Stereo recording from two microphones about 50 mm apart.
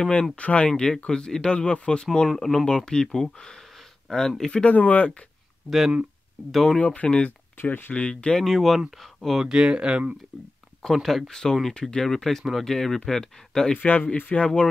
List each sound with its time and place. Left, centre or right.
0.0 s speech: left
2.2 s speech: centre
2.7 s speech: centre
4.6 s speech: left
6.5 s speech: centre
6.8 s speech: left
7.6 s speech: left
7.9 s speech: left
8.4 s speech: centre
9.4 s speech: centre
10.8 s speech: centre
13.7 s speech: left
14.3 s speech: left